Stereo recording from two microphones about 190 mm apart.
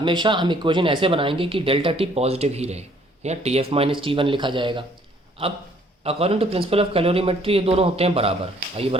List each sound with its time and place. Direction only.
0.0 s speech: 25° right (ahead or behind)
6.0 s speech: 30° right (ahead or behind)